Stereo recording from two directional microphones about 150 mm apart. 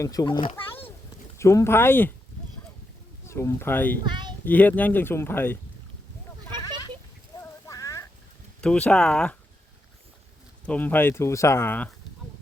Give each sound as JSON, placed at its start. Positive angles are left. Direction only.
{"t": 0.0, "sound": "a child's voice", "side_deg": 25}
{"t": 1.4, "sound": "speech", "side_deg": 20}
{"t": 3.2, "sound": "speech", "side_deg": 20}
{"t": 4.0, "sound": "a child's voice", "side_deg": -30}
{"t": 4.4, "sound": "speech", "side_deg": 10}
{"t": 7.7, "sound": "a sound", "side_deg": 20}
{"t": 8.6, "sound": "speech", "side_deg": 5}
{"t": 10.7, "sound": "speech", "side_deg": 10}